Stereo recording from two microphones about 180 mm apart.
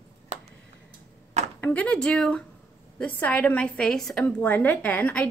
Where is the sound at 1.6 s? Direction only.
10° left (ahead or behind).